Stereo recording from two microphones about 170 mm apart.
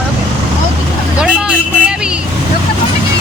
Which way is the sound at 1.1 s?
5° right (ahead or behind).